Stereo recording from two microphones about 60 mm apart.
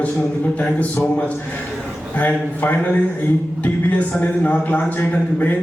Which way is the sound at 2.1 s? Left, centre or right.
Left.